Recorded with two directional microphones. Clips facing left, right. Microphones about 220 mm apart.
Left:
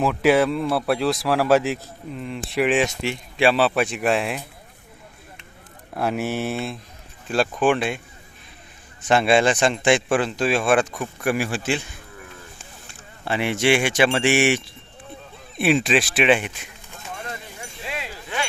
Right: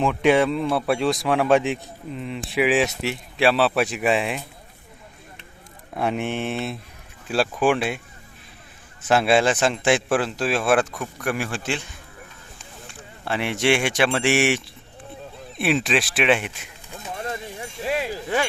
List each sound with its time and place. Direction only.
0.0 s speech: 5° left (ahead or behind)
5.9 s speech: centre (ahead or behind)
13.2 s speech: centre (ahead or behind)
17.8 s wind chime: 40° right (ahead or behind)